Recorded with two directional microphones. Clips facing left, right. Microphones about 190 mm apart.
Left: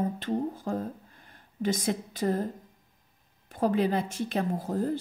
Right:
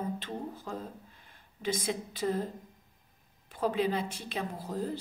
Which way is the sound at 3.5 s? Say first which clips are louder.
Left 4 dB; 45° left (ahead or behind).